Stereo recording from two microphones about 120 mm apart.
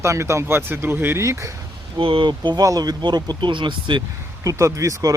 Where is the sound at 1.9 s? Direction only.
45° right (ahead or behind).